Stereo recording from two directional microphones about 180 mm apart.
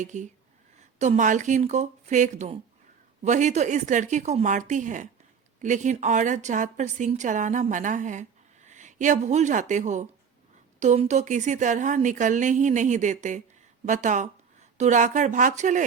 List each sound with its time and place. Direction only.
0.0 s speech: 40° right (ahead or behind)